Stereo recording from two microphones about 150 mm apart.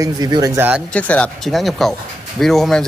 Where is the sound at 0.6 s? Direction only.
10° right (ahead or behind).